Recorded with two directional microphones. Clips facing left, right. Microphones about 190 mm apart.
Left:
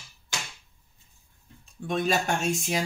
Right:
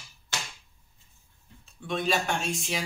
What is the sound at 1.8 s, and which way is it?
Speech, 45° left (ahead or behind).